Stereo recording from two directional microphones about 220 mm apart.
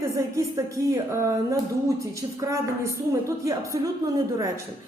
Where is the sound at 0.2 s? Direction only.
15° right (ahead or behind).